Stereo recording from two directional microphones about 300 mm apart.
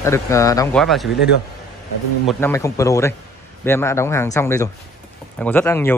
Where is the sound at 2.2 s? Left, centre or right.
Centre.